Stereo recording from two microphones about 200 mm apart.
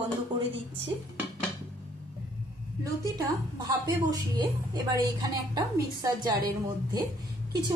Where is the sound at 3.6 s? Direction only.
20° right (ahead or behind).